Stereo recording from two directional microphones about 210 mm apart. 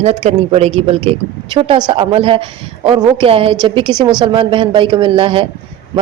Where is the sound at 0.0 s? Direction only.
30° right (ahead or behind).